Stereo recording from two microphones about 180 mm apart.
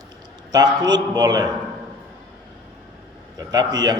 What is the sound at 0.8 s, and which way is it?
Speech, 20° right (ahead or behind).